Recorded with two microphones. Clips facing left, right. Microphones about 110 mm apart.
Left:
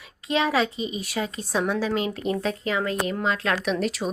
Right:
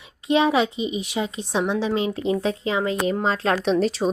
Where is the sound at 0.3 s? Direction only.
25° right (ahead or behind).